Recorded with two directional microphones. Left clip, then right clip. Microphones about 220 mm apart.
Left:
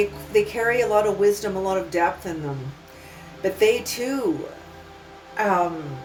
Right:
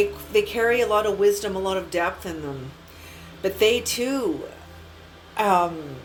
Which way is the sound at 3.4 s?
15° right (ahead or behind).